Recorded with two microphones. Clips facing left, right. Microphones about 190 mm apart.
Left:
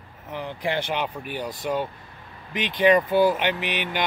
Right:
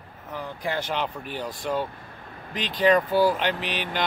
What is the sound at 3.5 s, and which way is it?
Speech, 60° left (ahead or behind).